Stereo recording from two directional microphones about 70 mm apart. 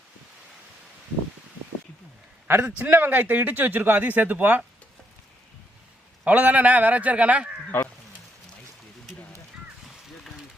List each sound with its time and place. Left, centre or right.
2.7 s speech: right
6.2 s speech: right
7.7 s speech: left